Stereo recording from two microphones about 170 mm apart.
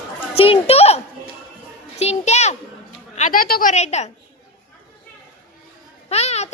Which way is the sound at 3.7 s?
40° left (ahead or behind).